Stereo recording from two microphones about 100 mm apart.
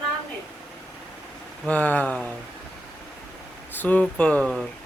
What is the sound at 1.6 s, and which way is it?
Speech, 15° left (ahead or behind).